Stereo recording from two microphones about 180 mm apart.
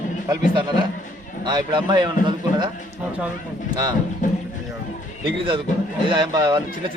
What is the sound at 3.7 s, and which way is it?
Speech, 25° right (ahead or behind).